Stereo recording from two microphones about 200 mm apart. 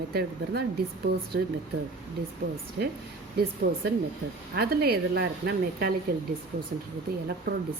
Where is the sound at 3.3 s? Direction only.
55° right (ahead or behind).